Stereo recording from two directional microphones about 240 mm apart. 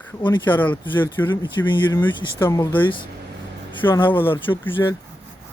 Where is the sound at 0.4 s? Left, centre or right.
Centre.